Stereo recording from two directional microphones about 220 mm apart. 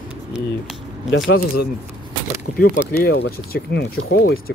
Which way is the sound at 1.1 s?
55° left (ahead or behind).